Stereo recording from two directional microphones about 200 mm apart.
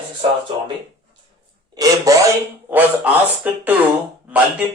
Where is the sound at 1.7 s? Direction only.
20° right (ahead or behind).